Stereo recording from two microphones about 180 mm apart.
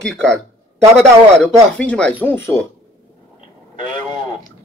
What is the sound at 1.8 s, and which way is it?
Speech, 5° left (ahead or behind).